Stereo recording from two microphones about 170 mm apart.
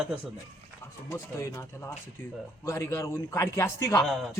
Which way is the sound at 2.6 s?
15° left (ahead or behind).